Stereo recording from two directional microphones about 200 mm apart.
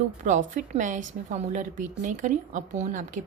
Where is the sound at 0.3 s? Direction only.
40° right (ahead or behind).